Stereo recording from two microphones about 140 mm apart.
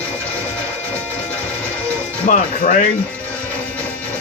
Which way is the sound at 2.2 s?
70° left (ahead or behind).